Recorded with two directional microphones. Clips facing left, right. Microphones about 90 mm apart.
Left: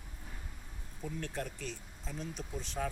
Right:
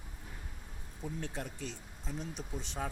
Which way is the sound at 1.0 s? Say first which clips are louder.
Left 1 dB; 20° right (ahead or behind).